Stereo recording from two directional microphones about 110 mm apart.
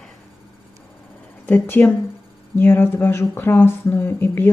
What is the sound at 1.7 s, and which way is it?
Speech, 20° left (ahead or behind).